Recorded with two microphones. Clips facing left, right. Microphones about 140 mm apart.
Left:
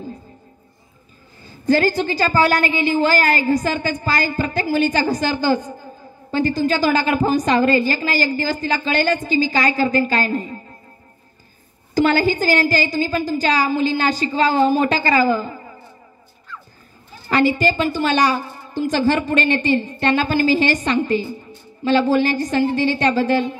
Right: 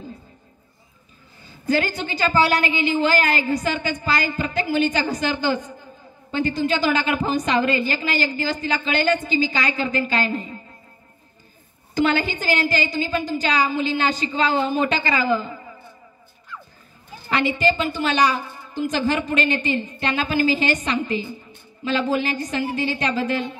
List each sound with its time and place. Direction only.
1.4 s a woman's voice: 40° left (ahead or behind)
11.9 s a woman's voice: 35° left (ahead or behind)
17.3 s a woman's voice: 40° left (ahead or behind)